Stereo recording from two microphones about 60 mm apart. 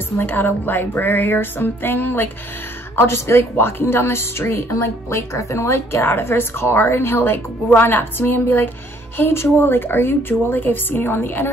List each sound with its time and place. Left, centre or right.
0.2 s a woman's voice: left